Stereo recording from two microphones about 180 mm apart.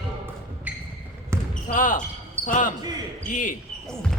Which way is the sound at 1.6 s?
45° left (ahead or behind).